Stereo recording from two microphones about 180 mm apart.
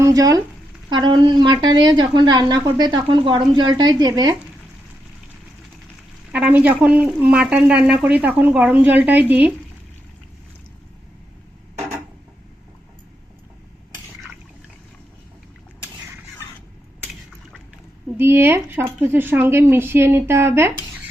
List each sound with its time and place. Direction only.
0.0 s a woman's voice: 20° right (ahead or behind)
6.3 s speech: 10° right (ahead or behind)
18.2 s speech: 10° right (ahead or behind)